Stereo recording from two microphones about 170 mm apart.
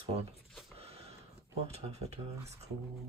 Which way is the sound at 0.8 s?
35° right (ahead or behind).